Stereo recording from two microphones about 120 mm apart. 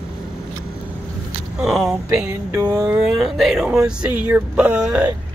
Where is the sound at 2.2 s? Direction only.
25° right (ahead or behind).